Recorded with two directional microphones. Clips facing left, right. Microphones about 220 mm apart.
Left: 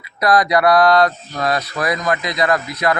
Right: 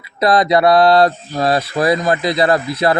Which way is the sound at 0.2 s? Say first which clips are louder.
Right 2 dB; 25° right (ahead or behind).